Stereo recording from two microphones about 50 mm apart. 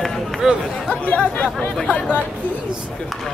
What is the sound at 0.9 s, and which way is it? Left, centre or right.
Speech, left.